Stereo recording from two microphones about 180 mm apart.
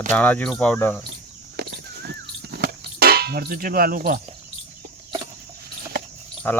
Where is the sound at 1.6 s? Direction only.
65° right (ahead or behind).